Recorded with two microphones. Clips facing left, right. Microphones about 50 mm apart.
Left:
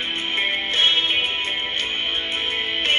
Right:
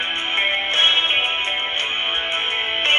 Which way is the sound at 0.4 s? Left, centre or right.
Right.